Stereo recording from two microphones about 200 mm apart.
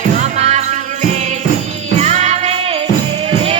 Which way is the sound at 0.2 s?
35° right (ahead or behind).